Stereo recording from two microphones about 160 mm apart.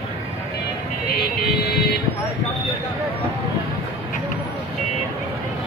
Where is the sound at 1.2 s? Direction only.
85° left.